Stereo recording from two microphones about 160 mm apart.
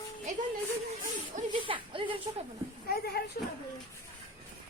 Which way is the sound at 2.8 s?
70° left (ahead or behind).